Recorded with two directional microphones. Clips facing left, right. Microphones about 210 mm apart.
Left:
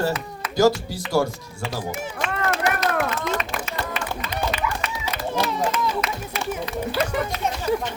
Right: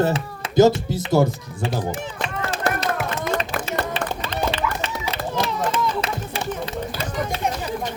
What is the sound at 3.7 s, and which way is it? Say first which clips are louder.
Music: right 4 dB; 30° right (ahead or behind).